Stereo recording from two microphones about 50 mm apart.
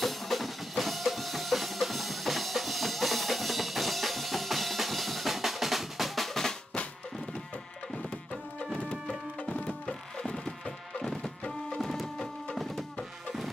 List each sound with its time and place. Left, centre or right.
0.0 s drum: centre
9.5 s music: left; by 12.8 s centre